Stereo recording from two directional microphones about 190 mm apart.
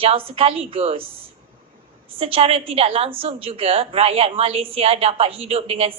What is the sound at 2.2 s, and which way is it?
A woman's voice, 30° right (ahead or behind).